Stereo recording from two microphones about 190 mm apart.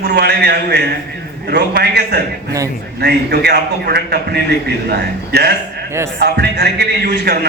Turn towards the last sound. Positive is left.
turn(degrees=-60)  # may be behind; listen again after turning